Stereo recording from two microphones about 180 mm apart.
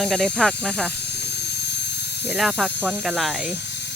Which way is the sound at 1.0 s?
70° left (ahead or behind).